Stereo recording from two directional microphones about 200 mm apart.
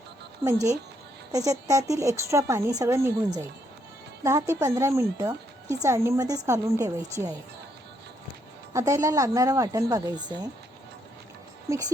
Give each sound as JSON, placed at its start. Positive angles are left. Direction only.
{"t": 0.4, "sound": "speech", "side_deg": -30}
{"t": 1.3, "sound": "a woman's voice", "side_deg": -15}
{"t": 8.7, "sound": "a woman's voice", "side_deg": -15}
{"t": 11.7, "sound": "a woman's voice", "side_deg": -15}